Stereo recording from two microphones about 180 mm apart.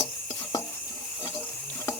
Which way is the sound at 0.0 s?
15° left (ahead or behind).